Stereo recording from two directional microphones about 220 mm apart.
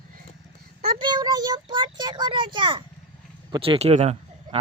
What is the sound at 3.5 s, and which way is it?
Speech, 25° right (ahead or behind).